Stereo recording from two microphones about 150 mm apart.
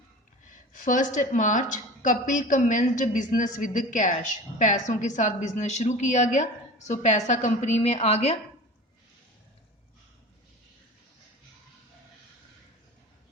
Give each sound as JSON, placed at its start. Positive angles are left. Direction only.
{"t": 0.5, "sound": "a woman's voice", "side_deg": 60}